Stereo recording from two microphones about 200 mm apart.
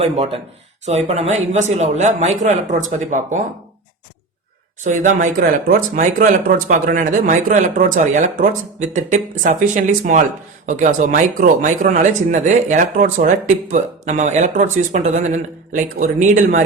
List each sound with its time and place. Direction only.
0.0 s speech: 30° right (ahead or behind)
4.8 s speech: 40° right (ahead or behind)